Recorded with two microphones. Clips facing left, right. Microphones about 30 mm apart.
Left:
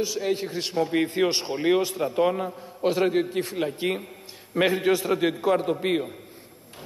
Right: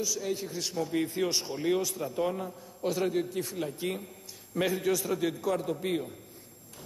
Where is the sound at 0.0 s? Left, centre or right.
Left.